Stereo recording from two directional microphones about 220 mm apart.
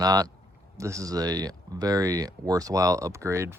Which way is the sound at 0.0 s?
15° right (ahead or behind).